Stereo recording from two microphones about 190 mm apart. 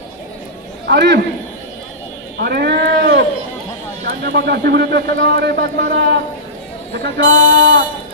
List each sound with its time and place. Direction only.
0.9 s a man's voice: 65° right (ahead or behind)
2.4 s a sound: 60° right (ahead or behind)
4.0 s a man's voice: 65° right (ahead or behind)